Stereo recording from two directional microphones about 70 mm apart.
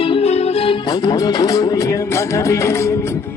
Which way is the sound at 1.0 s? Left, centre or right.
Left.